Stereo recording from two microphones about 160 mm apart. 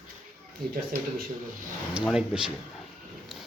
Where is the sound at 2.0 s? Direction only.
5° right (ahead or behind).